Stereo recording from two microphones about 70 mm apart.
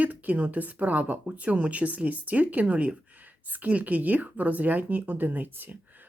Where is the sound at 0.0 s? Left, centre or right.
Right.